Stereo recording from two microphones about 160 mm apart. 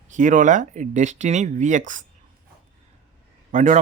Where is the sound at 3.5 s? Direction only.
50° right (ahead or behind).